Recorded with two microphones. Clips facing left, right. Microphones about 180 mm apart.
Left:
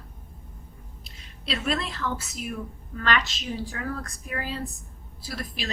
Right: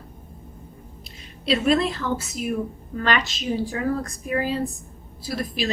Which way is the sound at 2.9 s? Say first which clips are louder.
Right 3 dB; 5° right (ahead or behind).